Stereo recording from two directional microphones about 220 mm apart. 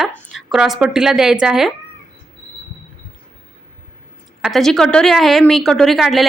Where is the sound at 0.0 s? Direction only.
Centre (ahead or behind).